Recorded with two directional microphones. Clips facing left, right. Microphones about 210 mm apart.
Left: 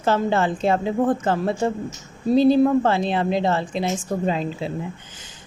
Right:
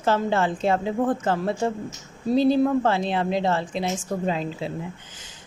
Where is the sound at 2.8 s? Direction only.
25° left (ahead or behind).